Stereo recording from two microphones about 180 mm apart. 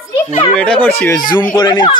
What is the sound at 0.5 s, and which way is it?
Speech, 5° left (ahead or behind).